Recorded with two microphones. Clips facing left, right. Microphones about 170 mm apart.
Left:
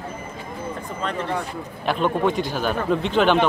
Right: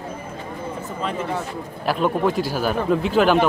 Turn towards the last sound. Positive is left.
turn(degrees=-5)  # may be behind; listen again after turning